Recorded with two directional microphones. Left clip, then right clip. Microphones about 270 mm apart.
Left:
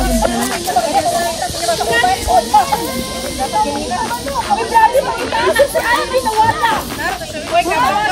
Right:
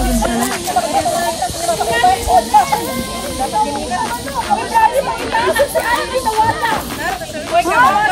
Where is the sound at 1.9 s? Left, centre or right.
Left.